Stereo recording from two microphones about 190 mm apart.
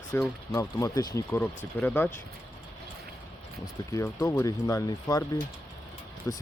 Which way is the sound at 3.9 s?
15° left (ahead or behind).